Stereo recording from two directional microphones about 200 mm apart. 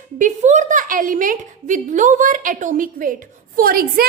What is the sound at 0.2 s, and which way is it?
A woman's voice, 40° right (ahead or behind).